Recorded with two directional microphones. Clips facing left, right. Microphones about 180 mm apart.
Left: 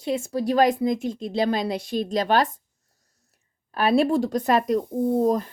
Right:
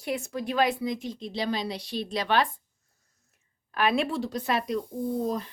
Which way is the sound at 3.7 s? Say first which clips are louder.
Left 6 dB; 35° left (ahead or behind).